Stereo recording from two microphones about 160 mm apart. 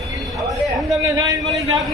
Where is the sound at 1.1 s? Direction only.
20° right (ahead or behind).